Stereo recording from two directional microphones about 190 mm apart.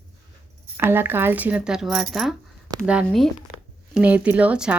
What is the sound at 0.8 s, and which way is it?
A woman's voice, 10° right (ahead or behind).